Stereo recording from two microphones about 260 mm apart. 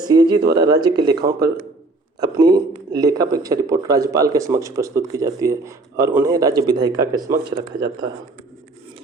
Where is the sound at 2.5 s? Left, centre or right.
Centre.